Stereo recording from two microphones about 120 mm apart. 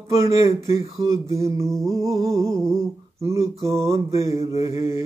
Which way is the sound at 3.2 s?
25° right (ahead or behind).